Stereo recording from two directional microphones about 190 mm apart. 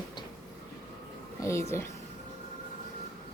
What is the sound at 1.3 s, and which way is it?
Speech, 15° left (ahead or behind).